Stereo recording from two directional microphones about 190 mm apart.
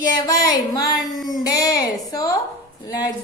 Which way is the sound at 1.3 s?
20° left (ahead or behind).